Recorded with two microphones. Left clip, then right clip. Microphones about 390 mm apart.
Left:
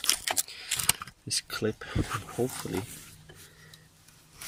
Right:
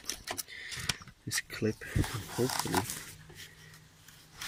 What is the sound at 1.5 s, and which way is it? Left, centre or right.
Speech, left.